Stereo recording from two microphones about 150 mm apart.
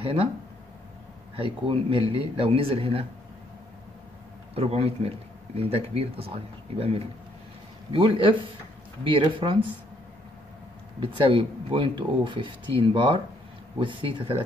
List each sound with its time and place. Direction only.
0.0 s speech: 35° right (ahead or behind)
1.3 s speech: 35° right (ahead or behind)
4.6 s speech: 40° right (ahead or behind)
11.0 s speech: 35° right (ahead or behind)